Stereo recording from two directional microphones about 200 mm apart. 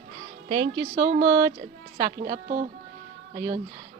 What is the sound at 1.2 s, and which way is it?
Speech, 15° right (ahead or behind).